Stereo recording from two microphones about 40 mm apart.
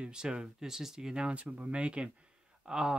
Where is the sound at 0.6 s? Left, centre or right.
Centre.